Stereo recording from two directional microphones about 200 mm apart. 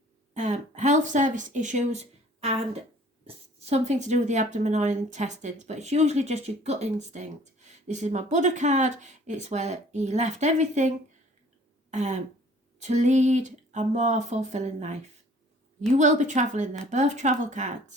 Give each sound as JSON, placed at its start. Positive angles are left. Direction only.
{"t": 0.3, "sound": "a sound", "side_deg": -35}
{"t": 3.2, "sound": "speech", "side_deg": -35}
{"t": 11.9, "sound": "throat clearing", "side_deg": -35}
{"t": 12.8, "sound": "speech", "side_deg": -35}
{"t": 16.0, "sound": "speech", "side_deg": -35}